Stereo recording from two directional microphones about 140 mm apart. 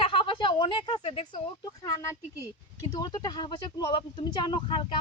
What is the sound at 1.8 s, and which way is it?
Speech, 25° left (ahead or behind).